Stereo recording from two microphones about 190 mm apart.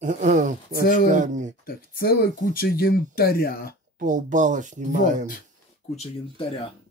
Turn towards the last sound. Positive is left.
turn(degrees=30)  # may be behind; listen again after turning